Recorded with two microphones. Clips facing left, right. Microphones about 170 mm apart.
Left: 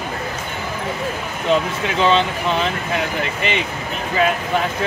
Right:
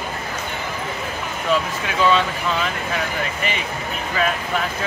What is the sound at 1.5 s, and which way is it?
Speech, 25° left (ahead or behind).